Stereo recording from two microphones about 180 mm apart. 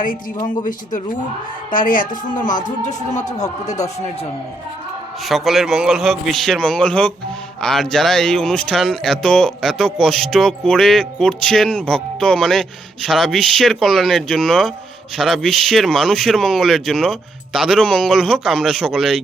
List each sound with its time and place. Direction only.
0.4 s speech: 45° left (ahead or behind)
5.2 s speech: centre (ahead or behind)